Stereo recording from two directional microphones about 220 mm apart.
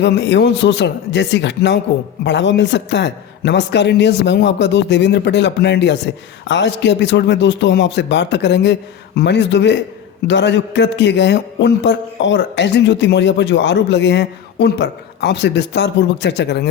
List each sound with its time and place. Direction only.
0.0 s a man's voice: 55° left (ahead or behind)